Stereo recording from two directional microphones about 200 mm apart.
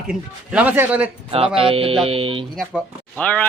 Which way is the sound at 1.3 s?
30° right (ahead or behind).